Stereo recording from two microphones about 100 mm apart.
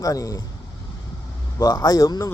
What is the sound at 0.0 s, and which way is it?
Speech, 35° left (ahead or behind).